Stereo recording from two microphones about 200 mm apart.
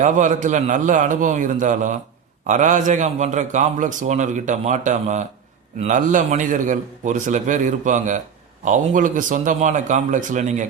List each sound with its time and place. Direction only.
0.0 s a man's voice: 40° right (ahead or behind)